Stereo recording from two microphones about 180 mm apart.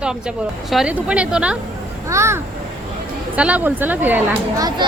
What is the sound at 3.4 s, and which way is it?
A woman's voice, 5° right (ahead or behind).